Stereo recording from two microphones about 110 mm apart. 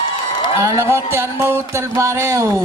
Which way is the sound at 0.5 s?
25° right (ahead or behind).